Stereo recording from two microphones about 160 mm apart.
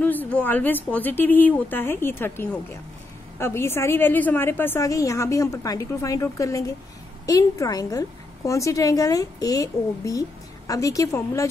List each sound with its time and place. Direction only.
0.0 s a woman's voice: 10° left (ahead or behind)